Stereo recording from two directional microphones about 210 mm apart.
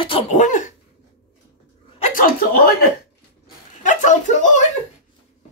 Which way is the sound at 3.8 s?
35° left (ahead or behind).